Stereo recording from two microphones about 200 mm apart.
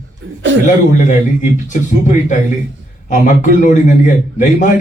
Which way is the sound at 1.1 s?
40° left (ahead or behind).